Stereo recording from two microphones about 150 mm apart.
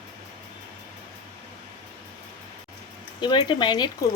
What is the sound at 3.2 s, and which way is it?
Speech, 35° left (ahead or behind).